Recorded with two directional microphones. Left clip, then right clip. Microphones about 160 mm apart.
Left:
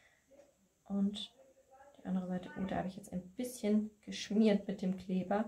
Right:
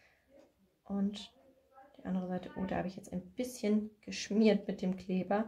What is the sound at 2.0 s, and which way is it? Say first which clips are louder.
Speech: right 2 dB; 35° right (ahead or behind).